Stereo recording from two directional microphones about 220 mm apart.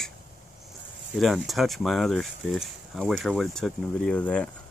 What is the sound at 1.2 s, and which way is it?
Speech, centre (ahead or behind).